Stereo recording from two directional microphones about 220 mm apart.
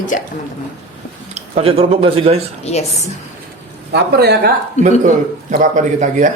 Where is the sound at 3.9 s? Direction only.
50° right (ahead or behind).